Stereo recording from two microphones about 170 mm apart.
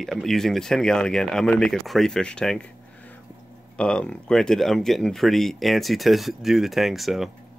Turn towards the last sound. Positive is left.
turn(degrees=0)  # may be behind; listen again after turning